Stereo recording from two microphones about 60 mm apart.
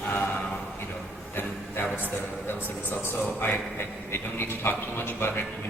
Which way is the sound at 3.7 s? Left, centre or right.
Left.